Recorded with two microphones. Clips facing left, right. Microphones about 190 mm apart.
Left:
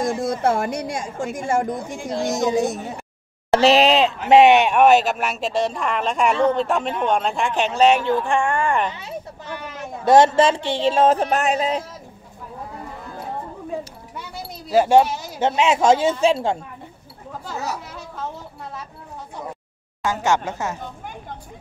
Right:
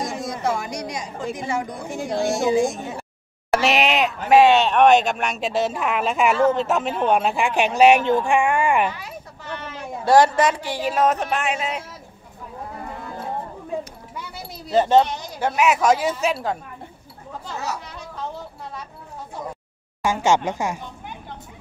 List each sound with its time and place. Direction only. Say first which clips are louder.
0.0 s a woman's voice: left 5 dB; 55° left (ahead or behind); by 8.9 s 10° right (ahead or behind)
10.0 s a woman's voice: left 2 dB; 25° left (ahead or behind)
14.7 s speech: left 2 dB; 10° left (ahead or behind)
15.4 s a woman's voice: left 2 dB; 25° left (ahead or behind)
17.5 s speech: left 1 dB; 5° left (ahead or behind)
20.2 s a woman's voice: right 2 dB; 15° right (ahead or behind)